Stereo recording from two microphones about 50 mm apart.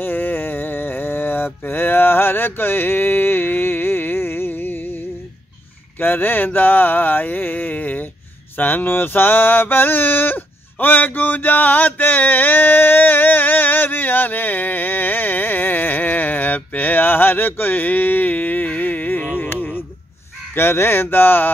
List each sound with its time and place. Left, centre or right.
0.0 s mantra: left
5.9 s a sound: left
20.5 s speech: left